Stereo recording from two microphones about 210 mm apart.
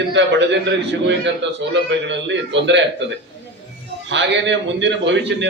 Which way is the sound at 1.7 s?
60° right (ahead or behind).